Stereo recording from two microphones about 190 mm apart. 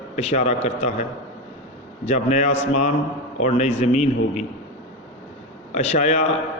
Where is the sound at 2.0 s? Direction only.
40° left (ahead or behind).